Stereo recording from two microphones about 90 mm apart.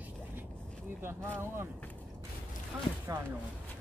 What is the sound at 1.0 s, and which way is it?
Speech, 25° right (ahead or behind).